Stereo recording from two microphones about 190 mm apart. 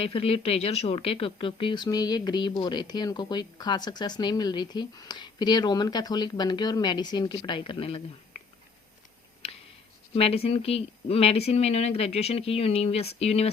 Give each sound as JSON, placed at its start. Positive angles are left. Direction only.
{"t": 0.0, "sound": "speech", "side_deg": 30}
{"t": 9.4, "sound": "a sound", "side_deg": 30}
{"t": 10.2, "sound": "speech", "side_deg": 30}